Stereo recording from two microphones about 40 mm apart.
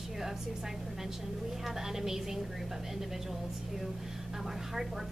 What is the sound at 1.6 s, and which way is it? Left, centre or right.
Speech, centre.